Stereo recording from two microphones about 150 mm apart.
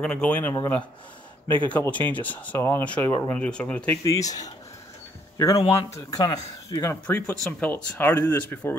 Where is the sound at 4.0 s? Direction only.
25° left (ahead or behind).